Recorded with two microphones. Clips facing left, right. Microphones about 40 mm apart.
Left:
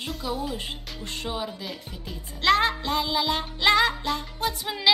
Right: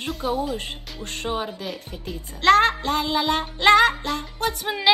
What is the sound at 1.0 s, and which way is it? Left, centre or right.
Speech, right.